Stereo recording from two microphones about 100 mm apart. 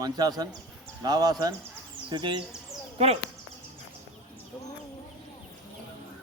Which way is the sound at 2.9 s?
90° right.